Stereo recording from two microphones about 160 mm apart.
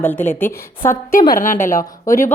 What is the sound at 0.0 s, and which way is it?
Speech, 10° left (ahead or behind).